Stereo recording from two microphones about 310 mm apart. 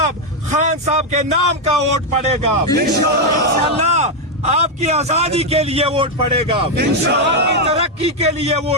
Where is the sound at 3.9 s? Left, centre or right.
Right.